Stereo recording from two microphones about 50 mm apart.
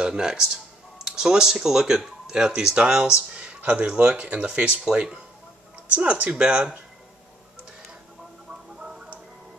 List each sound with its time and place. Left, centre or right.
0.0 s speech: centre
6.2 s speech: right
8.5 s a sound: centre